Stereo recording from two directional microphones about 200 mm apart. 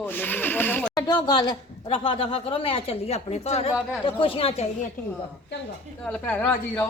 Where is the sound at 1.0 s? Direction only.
20° left (ahead or behind).